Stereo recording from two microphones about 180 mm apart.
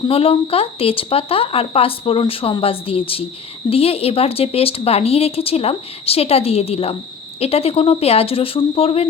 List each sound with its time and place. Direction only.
0.1 s speech: 30° left (ahead or behind)